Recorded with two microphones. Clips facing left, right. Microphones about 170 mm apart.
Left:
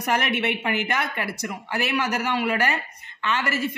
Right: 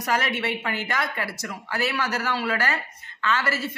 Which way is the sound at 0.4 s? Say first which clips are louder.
Left 3 dB; 20° left (ahead or behind).